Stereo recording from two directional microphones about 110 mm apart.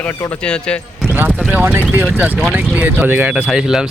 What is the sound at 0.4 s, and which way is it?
Speech, 10° left (ahead or behind).